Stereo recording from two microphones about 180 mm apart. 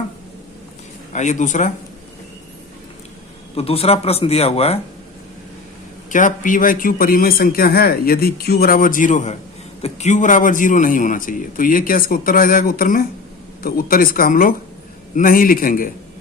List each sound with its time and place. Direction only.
1.1 s a man's voice: 40° left (ahead or behind)
3.5 s a man's voice: 30° left (ahead or behind)
6.1 s a man's voice: 45° left (ahead or behind)